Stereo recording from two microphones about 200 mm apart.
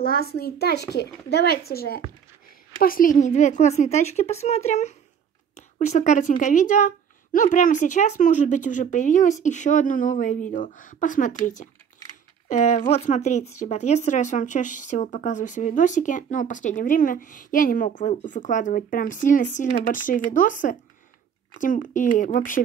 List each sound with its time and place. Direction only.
0.0 s a child's voice: 50° left (ahead or behind)